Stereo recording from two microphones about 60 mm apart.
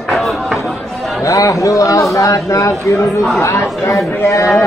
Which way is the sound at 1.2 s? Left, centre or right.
Left.